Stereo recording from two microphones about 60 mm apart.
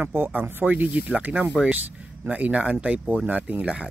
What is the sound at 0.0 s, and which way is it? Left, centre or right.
Speech, right.